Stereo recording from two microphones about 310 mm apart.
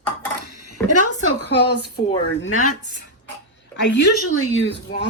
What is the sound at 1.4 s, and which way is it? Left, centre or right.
Speech, left.